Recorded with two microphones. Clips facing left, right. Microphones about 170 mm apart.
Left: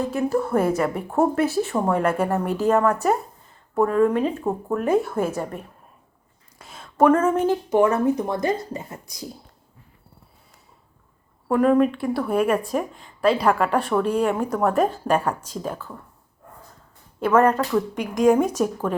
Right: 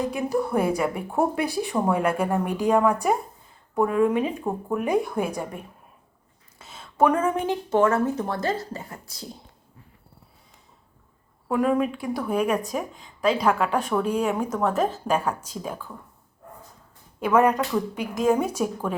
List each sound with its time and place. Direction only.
0.1 s a woman's voice: 15° right (ahead or behind)
0.4 s a woman's voice: centre (ahead or behind)
6.6 s a sound: 5° right (ahead or behind)
7.2 s a woman's voice: 10° right (ahead or behind)
7.7 s speech: 15° left (ahead or behind)
11.4 s speech: 5° right (ahead or behind)
14.0 s a woman's voice: 10° right (ahead or behind)
17.2 s a woman's voice: 15° right (ahead or behind)